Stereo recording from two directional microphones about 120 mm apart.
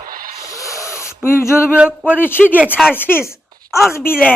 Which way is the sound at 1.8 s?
10° right (ahead or behind).